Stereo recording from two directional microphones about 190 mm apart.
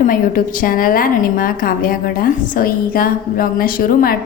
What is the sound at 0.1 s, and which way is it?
A woman's voice, 45° left (ahead or behind).